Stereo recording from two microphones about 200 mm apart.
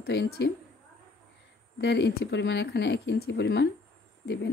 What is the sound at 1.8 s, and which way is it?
Speech, 60° left (ahead or behind).